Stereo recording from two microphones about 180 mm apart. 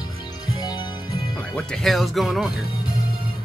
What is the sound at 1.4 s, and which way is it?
A man's voice, 5° left (ahead or behind).